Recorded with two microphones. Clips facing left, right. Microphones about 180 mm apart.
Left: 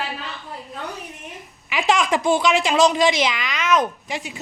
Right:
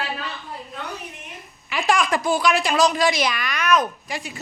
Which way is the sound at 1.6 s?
20° left (ahead or behind).